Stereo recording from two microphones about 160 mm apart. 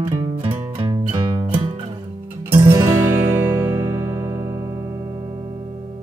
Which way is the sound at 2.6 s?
20° right (ahead or behind).